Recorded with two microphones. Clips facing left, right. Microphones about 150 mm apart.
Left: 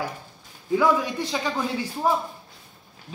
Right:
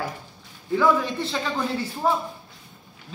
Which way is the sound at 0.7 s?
15° left (ahead or behind).